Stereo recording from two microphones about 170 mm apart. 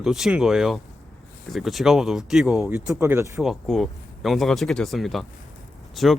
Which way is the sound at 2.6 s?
15° right (ahead or behind).